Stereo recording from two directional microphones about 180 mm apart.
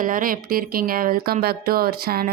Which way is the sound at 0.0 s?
50° right (ahead or behind).